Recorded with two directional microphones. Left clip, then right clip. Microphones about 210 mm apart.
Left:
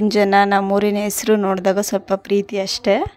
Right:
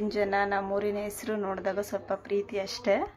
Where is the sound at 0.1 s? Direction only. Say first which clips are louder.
Left 13 dB; 50° left (ahead or behind).